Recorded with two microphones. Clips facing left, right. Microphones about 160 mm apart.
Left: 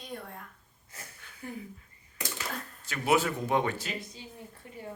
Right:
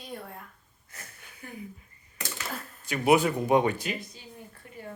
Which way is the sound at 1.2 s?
15° right (ahead or behind).